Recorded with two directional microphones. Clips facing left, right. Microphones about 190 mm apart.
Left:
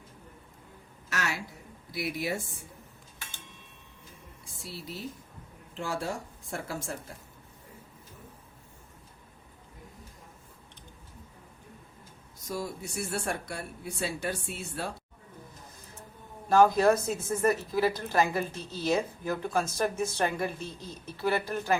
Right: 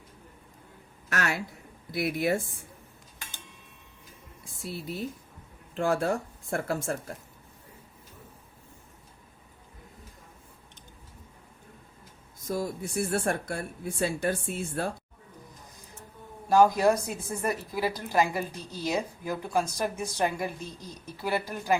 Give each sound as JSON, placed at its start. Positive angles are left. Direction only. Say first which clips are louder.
{"t": 1.1, "sound": "speech", "louder": "right 4 dB", "side_deg": -55}
{"t": 4.6, "sound": "speech", "louder": "right 5 dB", "side_deg": -55}
{"t": 12.5, "sound": "speech", "louder": "right 4 dB", "side_deg": -50}
{"t": 16.5, "sound": "speech", "louder": "even", "side_deg": -10}